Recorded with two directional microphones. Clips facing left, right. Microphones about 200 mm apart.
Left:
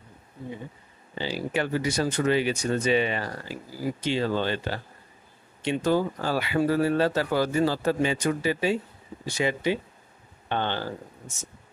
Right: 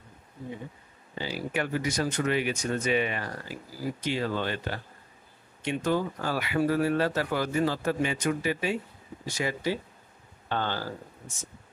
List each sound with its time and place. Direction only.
1.1 s speech: 30° left (ahead or behind)